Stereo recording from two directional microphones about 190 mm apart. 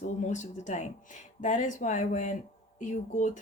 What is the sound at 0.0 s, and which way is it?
Speech, 40° left (ahead or behind).